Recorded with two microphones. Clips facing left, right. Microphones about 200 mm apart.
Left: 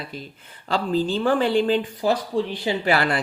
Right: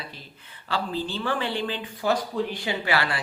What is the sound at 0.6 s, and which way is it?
Speech, 40° left (ahead or behind).